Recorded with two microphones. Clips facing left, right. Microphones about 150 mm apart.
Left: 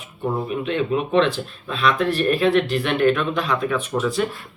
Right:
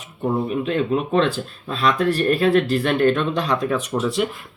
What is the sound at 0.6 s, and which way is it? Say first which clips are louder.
Speech: right 1 dB; 40° right (ahead or behind).